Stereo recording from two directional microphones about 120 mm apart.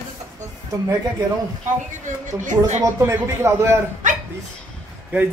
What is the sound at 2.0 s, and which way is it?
Speech, 90° right.